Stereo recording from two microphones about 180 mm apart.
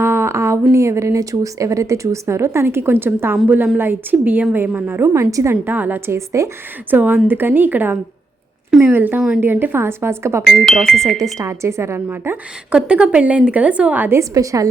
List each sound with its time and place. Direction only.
0.0 s a woman's voice: 15° right (ahead or behind)
10.4 s speech: centre (ahead or behind)
11.3 s a woman's voice: 15° right (ahead or behind)